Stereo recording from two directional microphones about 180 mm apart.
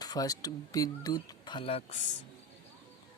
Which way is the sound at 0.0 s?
20° left (ahead or behind).